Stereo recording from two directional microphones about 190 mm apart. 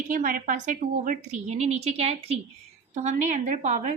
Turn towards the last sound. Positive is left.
turn(degrees=-40)  # may be behind; listen again after turning